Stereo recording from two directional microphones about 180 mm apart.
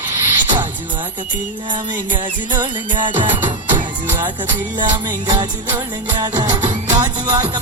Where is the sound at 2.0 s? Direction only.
25° right (ahead or behind).